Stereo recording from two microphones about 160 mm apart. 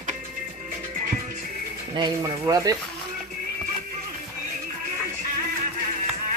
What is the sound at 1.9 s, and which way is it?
Speech, 25° right (ahead or behind).